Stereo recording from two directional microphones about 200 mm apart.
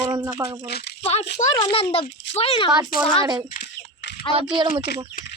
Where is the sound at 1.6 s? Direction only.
30° left (ahead or behind).